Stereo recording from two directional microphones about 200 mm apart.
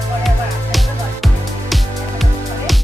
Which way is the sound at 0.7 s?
Centre (ahead or behind).